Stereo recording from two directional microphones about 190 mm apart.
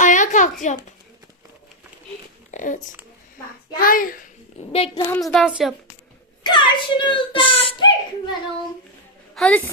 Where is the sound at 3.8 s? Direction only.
45° left (ahead or behind).